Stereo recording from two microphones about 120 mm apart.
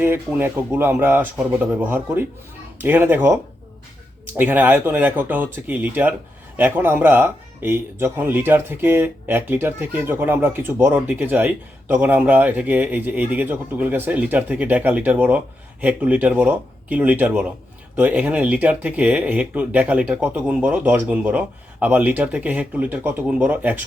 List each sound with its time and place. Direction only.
0.0 s speech: 15° right (ahead or behind)
4.4 s speech: 15° right (ahead or behind)